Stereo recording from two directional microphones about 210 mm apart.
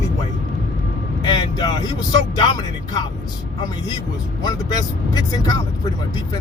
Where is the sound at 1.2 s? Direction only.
20° left (ahead or behind).